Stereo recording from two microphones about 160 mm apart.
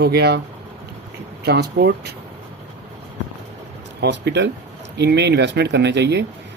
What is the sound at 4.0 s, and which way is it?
Speech, 90° right.